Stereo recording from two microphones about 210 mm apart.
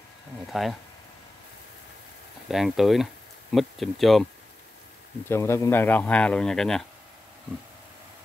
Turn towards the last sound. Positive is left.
turn(degrees=0)  # may be behind; listen again after turning